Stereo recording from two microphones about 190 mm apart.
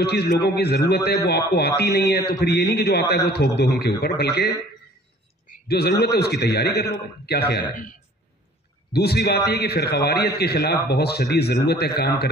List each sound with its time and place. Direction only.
0.0 s a man's voice: 60° left (ahead or behind)
8.9 s a man's voice: 55° left (ahead or behind)